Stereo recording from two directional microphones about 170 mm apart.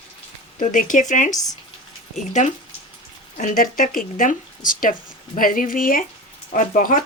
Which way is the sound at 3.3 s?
50° left (ahead or behind).